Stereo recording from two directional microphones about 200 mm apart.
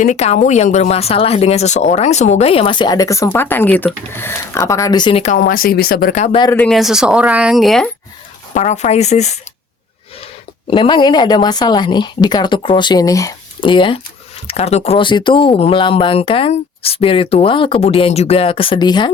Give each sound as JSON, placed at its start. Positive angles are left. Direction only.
{"t": 0.0, "sound": "speech", "side_deg": 35}
{"t": 5.2, "sound": "speech", "side_deg": 45}
{"t": 6.5, "sound": "speech", "side_deg": 5}
{"t": 8.5, "sound": "speech", "side_deg": 35}
{"t": 10.7, "sound": "speech", "side_deg": 25}